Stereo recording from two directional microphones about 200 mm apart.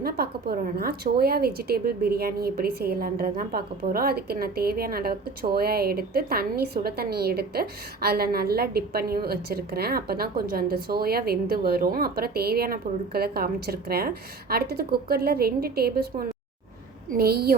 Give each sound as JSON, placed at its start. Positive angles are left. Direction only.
{"t": 0.0, "sound": "a woman's voice", "side_deg": -50}